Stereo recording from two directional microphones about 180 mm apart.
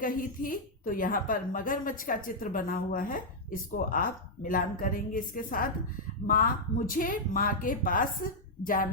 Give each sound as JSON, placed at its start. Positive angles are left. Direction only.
{"t": 0.0, "sound": "a woman's voice", "side_deg": 50}